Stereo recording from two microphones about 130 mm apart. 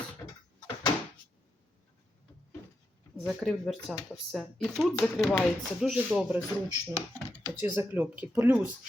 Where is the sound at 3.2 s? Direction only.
Centre (ahead or behind).